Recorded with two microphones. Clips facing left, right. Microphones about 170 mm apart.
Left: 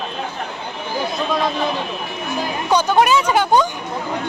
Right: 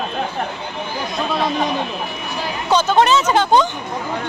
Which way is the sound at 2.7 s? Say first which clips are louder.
Right 1 dB; 10° left (ahead or behind).